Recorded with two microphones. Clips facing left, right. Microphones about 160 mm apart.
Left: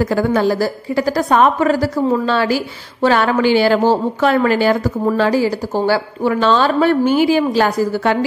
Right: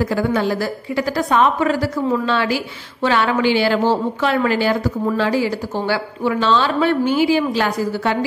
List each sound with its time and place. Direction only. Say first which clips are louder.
0.0 s a woman's voice: left 3 dB; 45° left (ahead or behind)